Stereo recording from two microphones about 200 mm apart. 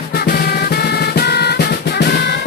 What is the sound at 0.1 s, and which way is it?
Drum, 55° left (ahead or behind).